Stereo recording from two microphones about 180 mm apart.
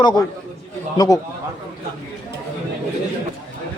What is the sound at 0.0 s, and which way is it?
A man's voice, 25° left (ahead or behind).